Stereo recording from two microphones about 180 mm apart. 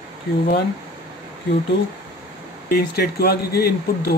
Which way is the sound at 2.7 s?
60° left (ahead or behind).